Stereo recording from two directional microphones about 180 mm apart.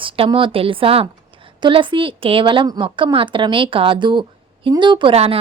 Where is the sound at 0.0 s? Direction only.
30° right (ahead or behind).